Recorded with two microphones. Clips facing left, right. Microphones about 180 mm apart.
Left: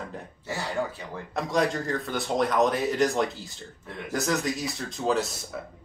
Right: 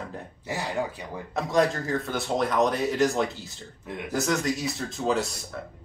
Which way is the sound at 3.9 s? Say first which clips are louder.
Right 3 dB; 15° right (ahead or behind).